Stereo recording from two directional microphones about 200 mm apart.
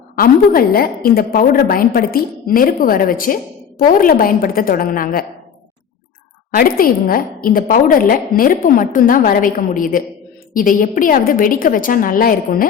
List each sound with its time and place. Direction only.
0.2 s a woman's voice: 45° left (ahead or behind)
6.5 s a woman's voice: 45° left (ahead or behind)